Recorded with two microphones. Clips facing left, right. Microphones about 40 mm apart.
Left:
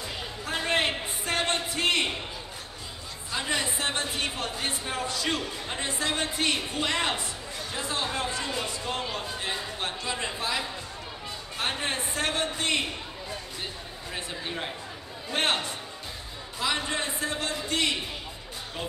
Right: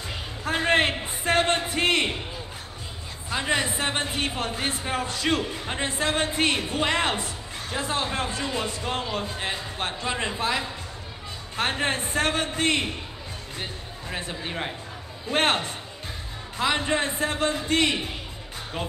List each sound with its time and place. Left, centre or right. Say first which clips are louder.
0.5 s a sound: right 5 dB; right
1.0 s music: right 6 dB; right
3.3 s a man's voice: right 4 dB; right
14.1 s a man's voice: right 3 dB; right